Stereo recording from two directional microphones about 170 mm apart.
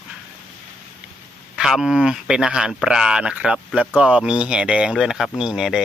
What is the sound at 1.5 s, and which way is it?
Speech, 5° right (ahead or behind).